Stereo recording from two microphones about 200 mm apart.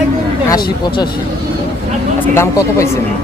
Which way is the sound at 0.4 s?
20° left (ahead or behind).